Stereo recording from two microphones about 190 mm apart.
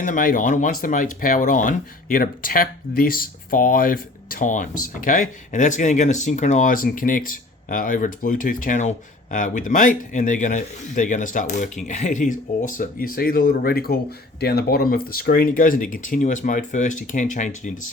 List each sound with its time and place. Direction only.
0.0 s speech: 45° left (ahead or behind)